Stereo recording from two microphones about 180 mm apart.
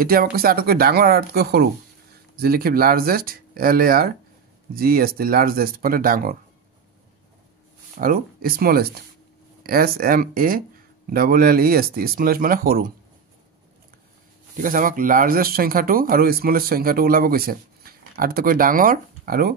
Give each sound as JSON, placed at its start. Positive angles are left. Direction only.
{"t": 0.0, "sound": "speech", "side_deg": -55}
{"t": 8.0, "sound": "speech", "side_deg": -55}
{"t": 14.6, "sound": "speech", "side_deg": -50}